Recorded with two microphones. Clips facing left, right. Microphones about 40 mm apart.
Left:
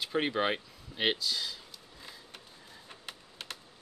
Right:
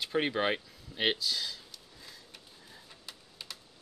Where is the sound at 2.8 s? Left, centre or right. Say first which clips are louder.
Left 3 dB; left.